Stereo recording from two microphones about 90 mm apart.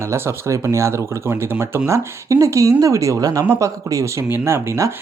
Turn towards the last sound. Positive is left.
turn(degrees=-30)  # may be behind; listen again after turning